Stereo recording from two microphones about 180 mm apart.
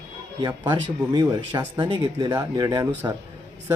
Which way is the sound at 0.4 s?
25° right (ahead or behind).